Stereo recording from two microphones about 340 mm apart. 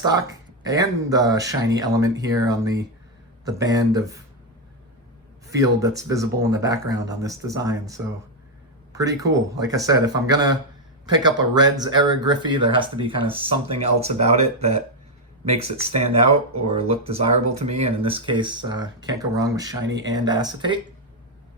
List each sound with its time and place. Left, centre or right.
0.0 s speech: centre
5.5 s speech: centre